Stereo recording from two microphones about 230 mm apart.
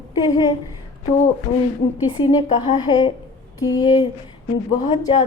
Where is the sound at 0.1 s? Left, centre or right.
Centre.